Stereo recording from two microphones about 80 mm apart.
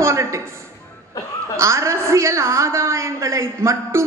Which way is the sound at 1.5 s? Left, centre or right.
Right.